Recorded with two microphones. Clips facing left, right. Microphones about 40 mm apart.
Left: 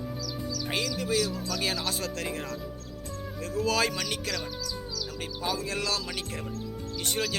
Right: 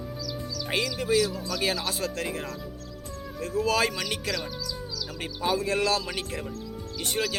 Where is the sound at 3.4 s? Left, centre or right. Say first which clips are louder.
Right 2 dB; centre.